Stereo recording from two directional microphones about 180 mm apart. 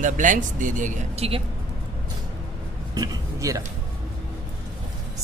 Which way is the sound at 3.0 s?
20° right (ahead or behind).